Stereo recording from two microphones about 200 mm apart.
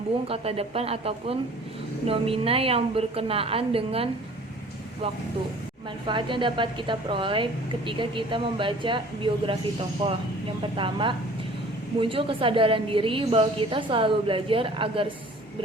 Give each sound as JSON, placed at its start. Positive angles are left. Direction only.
{"t": 0.3, "sound": "a woman's voice", "side_deg": -30}
{"t": 6.1, "sound": "a woman's voice", "side_deg": -25}
{"t": 10.8, "sound": "a woman's voice", "side_deg": -25}